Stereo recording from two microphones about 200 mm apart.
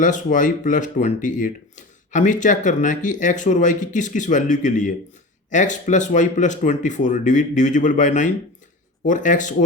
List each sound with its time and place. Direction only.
0.0 s speech: 40° left (ahead or behind)